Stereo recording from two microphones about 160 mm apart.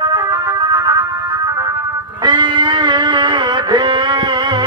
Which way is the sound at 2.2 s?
30° right (ahead or behind).